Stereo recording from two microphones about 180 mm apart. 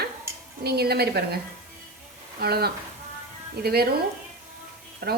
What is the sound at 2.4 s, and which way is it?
Speech, 60° right (ahead or behind).